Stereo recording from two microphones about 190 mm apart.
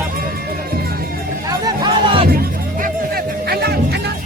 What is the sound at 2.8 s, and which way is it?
Music, 55° right (ahead or behind).